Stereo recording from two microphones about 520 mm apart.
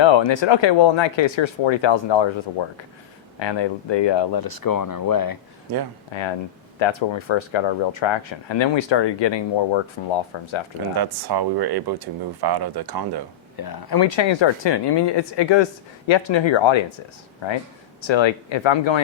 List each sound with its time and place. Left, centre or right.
0.0 s speech: left
6.1 s speech: left
10.9 s speech: right
13.6 s speech: left